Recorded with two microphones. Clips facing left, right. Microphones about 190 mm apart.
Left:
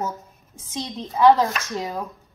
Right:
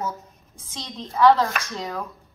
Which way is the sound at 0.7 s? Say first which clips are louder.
Left 4 dB; 20° left (ahead or behind).